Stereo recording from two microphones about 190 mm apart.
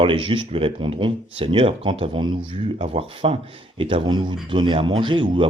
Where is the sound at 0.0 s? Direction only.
30° right (ahead or behind).